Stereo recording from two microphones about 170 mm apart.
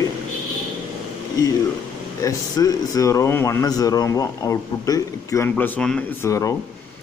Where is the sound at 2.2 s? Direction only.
20° left (ahead or behind).